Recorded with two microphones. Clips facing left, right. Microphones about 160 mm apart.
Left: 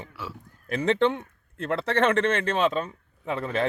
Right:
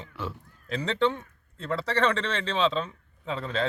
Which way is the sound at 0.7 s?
55° left (ahead or behind).